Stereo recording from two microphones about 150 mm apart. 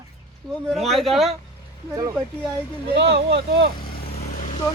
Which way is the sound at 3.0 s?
90° right.